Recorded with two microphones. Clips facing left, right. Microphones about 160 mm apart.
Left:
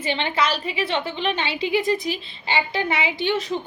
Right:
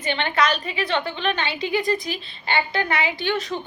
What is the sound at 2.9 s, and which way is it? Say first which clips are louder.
Speech: left 1 dB; 25° left (ahead or behind).